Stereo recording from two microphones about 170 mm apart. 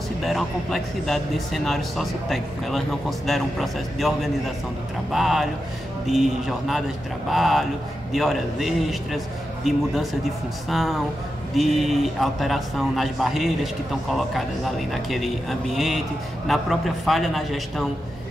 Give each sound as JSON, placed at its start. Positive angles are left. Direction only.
{"t": 0.2, "sound": "speech", "side_deg": 0}